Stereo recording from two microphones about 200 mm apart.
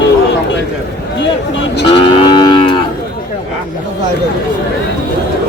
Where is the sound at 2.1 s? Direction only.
20° left (ahead or behind).